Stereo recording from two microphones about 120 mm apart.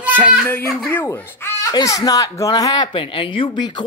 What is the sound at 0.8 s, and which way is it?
Speech, 20° left (ahead or behind).